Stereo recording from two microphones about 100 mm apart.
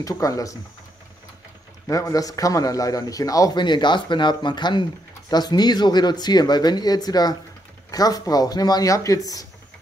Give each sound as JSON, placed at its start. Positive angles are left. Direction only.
{"t": 0.0, "sound": "a man's voice", "side_deg": 35}
{"t": 1.9, "sound": "a man's voice", "side_deg": 35}
{"t": 3.5, "sound": "a man's voice", "side_deg": 50}